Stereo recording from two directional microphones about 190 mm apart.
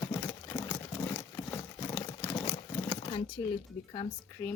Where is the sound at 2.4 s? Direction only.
30° left (ahead or behind).